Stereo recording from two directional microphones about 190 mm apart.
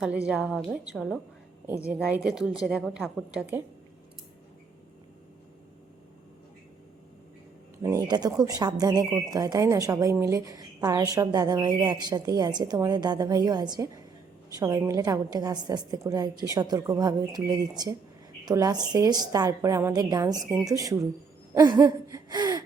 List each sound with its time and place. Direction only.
0.3 s a woman's voice: 5° right (ahead or behind)
7.8 s a woman's voice: 20° right (ahead or behind)
21.5 s a sound: 20° right (ahead or behind)